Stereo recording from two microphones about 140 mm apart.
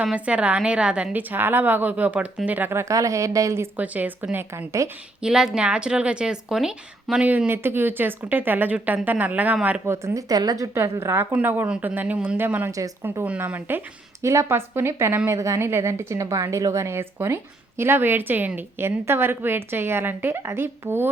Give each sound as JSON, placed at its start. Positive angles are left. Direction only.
{"t": 0.0, "sound": "a woman's voice", "side_deg": -10}
{"t": 5.2, "sound": "a woman's voice", "side_deg": -5}
{"t": 9.8, "sound": "a woman's voice", "side_deg": -20}